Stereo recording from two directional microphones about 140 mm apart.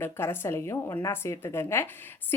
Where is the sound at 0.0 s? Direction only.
15° left (ahead or behind).